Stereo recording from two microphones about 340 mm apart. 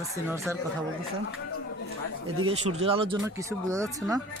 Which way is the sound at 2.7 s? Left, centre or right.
Centre.